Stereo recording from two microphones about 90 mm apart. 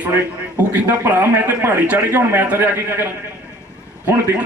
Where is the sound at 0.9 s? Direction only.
20° right (ahead or behind).